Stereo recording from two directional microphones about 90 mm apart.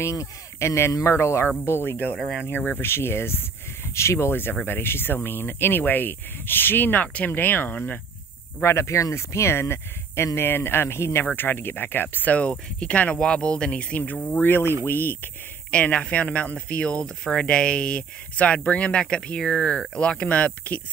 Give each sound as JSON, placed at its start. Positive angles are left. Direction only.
{"t": 0.0, "sound": "speech", "side_deg": 35}
{"t": 2.1, "sound": "speech", "side_deg": 0}
{"t": 2.8, "sound": "speech", "side_deg": 25}
{"t": 8.6, "sound": "speech", "side_deg": 30}
{"t": 14.4, "sound": "speech", "side_deg": 25}